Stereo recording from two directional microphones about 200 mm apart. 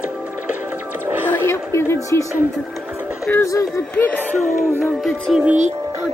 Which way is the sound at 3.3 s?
15° left (ahead or behind).